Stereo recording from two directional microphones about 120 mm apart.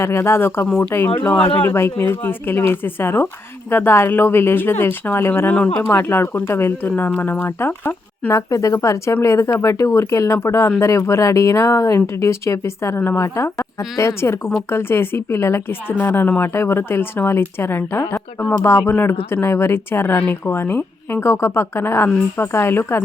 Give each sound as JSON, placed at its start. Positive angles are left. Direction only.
{"t": 0.0, "sound": "a woman's voice", "side_deg": 20}